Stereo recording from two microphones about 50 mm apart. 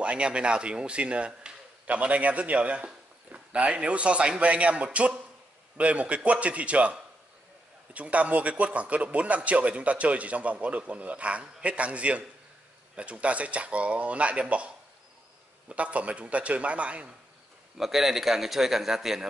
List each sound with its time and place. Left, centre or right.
0.0 s a man's voice: right
15.7 s a man's voice: right
17.7 s a man's voice: centre